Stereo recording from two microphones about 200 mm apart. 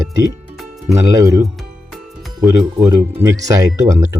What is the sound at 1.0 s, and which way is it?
Speech, 15° right (ahead or behind).